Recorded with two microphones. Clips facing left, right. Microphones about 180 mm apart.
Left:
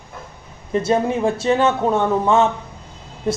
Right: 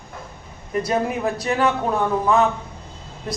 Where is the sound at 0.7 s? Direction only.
25° left (ahead or behind).